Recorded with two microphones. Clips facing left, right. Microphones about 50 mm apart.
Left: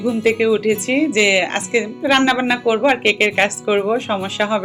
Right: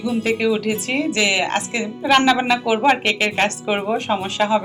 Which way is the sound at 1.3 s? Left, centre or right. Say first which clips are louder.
Left 4 dB; centre.